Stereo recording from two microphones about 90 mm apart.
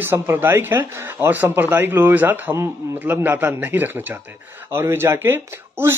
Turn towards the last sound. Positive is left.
turn(degrees=-25)  # may be behind; listen again after turning